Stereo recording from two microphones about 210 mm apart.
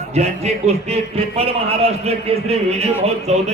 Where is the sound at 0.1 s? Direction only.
30° right (ahead or behind).